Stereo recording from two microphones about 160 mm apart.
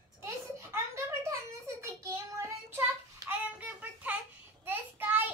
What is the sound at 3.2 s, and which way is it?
Child singing, 10° right (ahead or behind).